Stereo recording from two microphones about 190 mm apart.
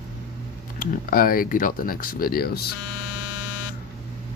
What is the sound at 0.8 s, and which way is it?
Speech, 50° left (ahead or behind).